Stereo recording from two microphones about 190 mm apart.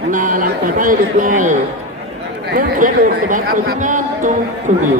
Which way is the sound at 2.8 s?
45° right (ahead or behind).